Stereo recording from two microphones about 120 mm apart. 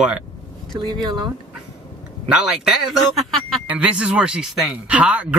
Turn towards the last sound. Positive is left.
turn(degrees=-10)  # may be behind; listen again after turning